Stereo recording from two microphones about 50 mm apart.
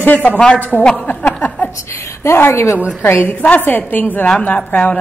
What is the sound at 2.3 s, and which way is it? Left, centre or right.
Speech, left.